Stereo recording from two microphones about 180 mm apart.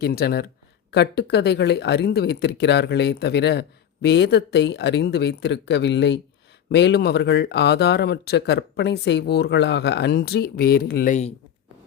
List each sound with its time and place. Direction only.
0.0 s speech: 60° left (ahead or behind)
11.1 s speech: 40° left (ahead or behind)